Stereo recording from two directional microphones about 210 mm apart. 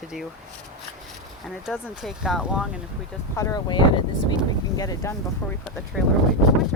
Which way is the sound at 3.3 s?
15° left (ahead or behind).